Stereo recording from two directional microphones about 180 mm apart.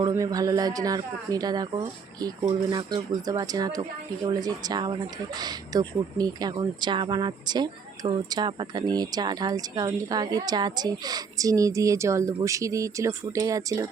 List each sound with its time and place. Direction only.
0.0 s a woman's voice: 20° right (ahead or behind)